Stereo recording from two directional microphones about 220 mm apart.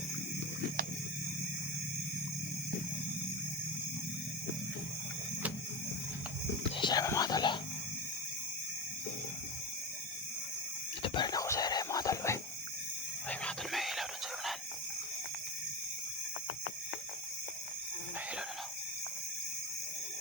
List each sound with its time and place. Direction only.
6.7 s speech: 20° left (ahead or behind)
11.0 s whispering: 20° left (ahead or behind)
13.4 s whispering: centre (ahead or behind)